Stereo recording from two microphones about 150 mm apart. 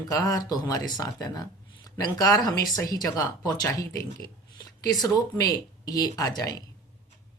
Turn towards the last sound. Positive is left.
turn(degrees=25)  # may be behind; listen again after turning